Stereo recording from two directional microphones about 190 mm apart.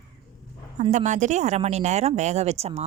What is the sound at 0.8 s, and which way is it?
Speech, 40° right (ahead or behind).